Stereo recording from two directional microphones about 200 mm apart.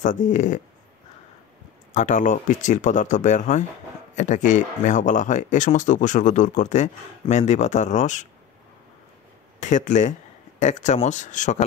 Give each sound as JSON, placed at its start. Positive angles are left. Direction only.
{"t": 0.0, "sound": "speech", "side_deg": 40}
{"t": 2.0, "sound": "speech", "side_deg": 40}
{"t": 9.6, "sound": "speech", "side_deg": 35}